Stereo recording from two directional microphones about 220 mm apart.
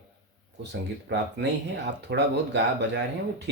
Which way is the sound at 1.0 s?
50° right (ahead or behind).